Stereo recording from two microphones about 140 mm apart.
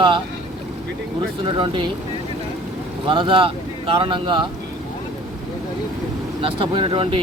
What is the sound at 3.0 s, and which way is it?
Speech, 35° right (ahead or behind).